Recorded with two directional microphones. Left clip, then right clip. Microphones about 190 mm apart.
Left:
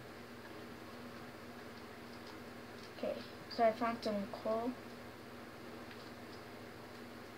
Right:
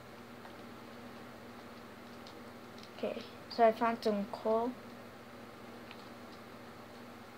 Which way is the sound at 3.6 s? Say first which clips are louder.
Right 5 dB; 55° right (ahead or behind).